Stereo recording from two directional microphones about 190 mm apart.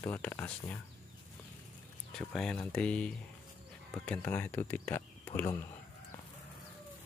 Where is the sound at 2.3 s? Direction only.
Centre (ahead or behind).